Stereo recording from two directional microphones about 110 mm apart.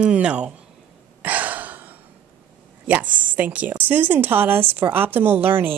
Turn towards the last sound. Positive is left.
turn(degrees=-20)  # may be behind; listen again after turning